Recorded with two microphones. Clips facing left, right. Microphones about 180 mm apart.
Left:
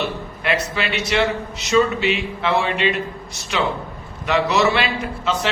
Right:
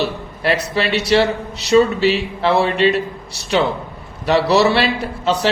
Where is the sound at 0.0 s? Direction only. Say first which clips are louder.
Right 4 dB; 35° right (ahead or behind).